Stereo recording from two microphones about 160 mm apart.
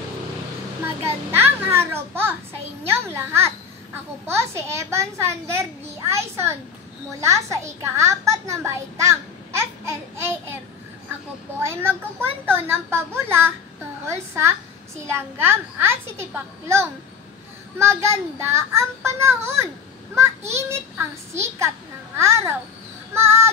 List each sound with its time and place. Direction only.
1.3 s a child's voice: 15° right (ahead or behind)
11.6 s a child's voice: 15° right (ahead or behind)